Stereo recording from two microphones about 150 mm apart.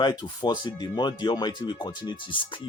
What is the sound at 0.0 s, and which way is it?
Speech, 30° left (ahead or behind).